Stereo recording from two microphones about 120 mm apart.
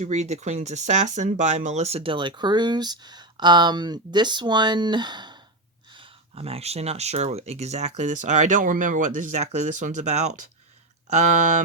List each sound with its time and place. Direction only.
0.0 s speech: 70° right (ahead or behind); by 5.4 s 40° right (ahead or behind)
5.9 s speech: 50° right (ahead or behind); by 10.3 s 75° right (ahead or behind)
11.1 s speech: 85° right